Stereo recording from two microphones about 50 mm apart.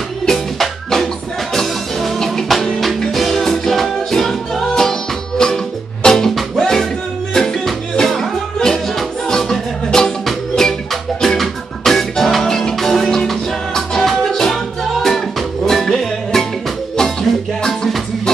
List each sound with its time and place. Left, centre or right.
0.3 s music: centre
17.6 s music: centre